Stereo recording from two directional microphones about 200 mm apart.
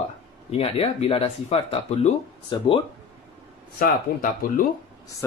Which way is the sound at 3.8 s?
45° left (ahead or behind).